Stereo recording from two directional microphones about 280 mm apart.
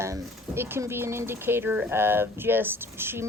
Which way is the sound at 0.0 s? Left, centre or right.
Centre.